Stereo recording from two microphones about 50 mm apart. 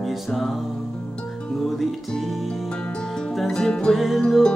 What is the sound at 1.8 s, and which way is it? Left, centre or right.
Music, centre.